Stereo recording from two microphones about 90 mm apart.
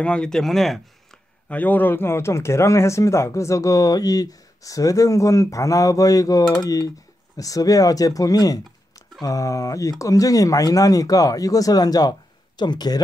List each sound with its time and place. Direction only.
0.0 s speech: 10° left (ahead or behind)
1.5 s speech: 20° left (ahead or behind); by 13.0 s 50° left (ahead or behind)